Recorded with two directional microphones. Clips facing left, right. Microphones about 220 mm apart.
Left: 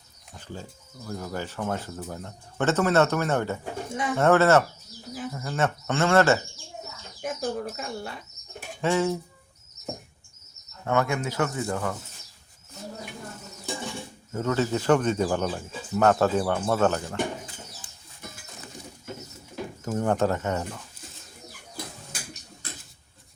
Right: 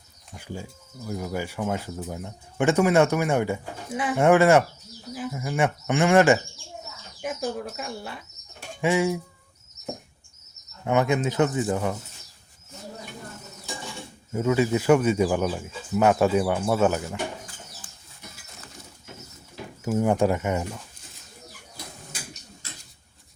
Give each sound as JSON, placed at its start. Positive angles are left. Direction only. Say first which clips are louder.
{"t": 0.3, "sound": "speech", "louder": "right 3 dB", "side_deg": -10}
{"t": 7.2, "sound": "speech", "louder": "even", "side_deg": 0}
{"t": 10.8, "sound": "speech", "louder": "right 3 dB", "side_deg": -20}
{"t": 14.3, "sound": "speech", "louder": "right 3 dB", "side_deg": -10}
{"t": 19.8, "sound": "speech", "louder": "right 3 dB", "side_deg": -10}